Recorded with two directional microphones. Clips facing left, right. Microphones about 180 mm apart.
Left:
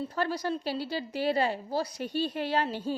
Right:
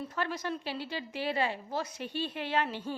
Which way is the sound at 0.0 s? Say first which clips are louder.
Left 4 dB; 35° left (ahead or behind).